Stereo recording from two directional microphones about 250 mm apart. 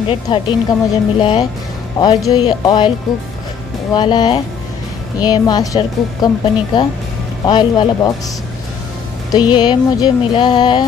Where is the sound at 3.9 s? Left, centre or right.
Centre.